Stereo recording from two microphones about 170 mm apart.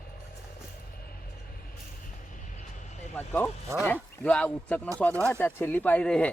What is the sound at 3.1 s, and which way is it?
Speech, 10° left (ahead or behind).